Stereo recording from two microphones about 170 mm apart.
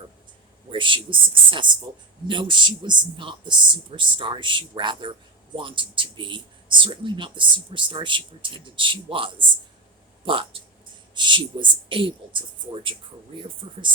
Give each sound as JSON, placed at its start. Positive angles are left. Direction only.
{"t": 0.7, "sound": "speech", "side_deg": -30}